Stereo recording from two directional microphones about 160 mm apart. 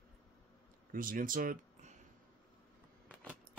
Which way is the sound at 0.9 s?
60° right (ahead or behind).